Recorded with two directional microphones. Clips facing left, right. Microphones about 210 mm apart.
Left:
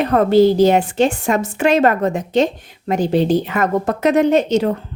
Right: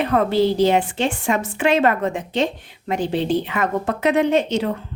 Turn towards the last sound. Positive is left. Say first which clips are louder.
# left 4 dB
turn(degrees=40)  # may be behind; listen again after turning